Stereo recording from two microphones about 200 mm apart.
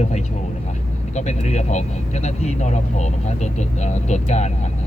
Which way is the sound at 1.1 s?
35° left (ahead or behind).